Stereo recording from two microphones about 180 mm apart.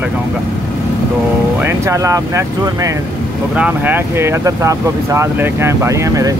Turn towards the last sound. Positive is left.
turn(degrees=-20)  # may be behind; listen again after turning